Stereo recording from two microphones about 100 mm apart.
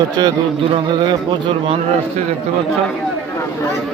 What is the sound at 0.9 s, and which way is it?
Speech, 50° right (ahead or behind).